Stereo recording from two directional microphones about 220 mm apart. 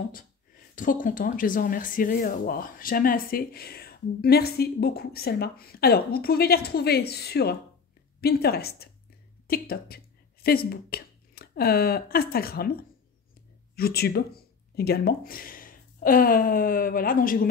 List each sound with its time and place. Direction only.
0.7 s speech: 35° left (ahead or behind)
13.7 s speech: 45° left (ahead or behind)